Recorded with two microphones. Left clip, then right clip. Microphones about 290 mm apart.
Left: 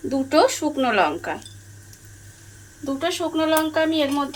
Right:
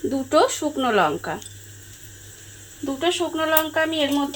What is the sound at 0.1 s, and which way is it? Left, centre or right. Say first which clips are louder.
Speech: left 2 dB; right.